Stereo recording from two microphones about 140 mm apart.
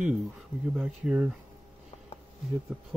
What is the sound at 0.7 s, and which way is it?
Speech, 10° right (ahead or behind).